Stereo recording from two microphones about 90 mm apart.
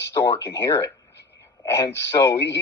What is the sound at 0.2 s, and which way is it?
A man's voice, 30° left (ahead or behind).